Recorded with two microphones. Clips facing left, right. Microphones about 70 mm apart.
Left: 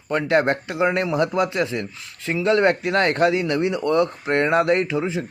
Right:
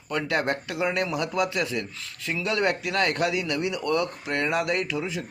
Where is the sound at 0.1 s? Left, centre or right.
Left.